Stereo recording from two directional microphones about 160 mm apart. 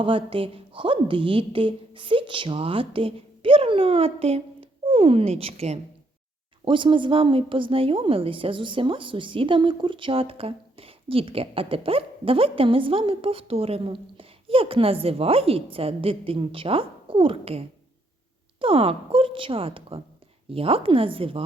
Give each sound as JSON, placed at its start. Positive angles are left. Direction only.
{"t": 0.0, "sound": "a woman's voice", "side_deg": -35}